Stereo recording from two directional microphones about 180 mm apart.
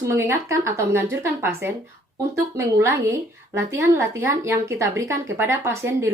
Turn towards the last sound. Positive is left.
turn(degrees=-15)  # may be behind; listen again after turning